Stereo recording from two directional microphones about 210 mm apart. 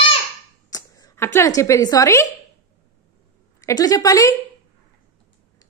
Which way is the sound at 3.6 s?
15° left (ahead or behind).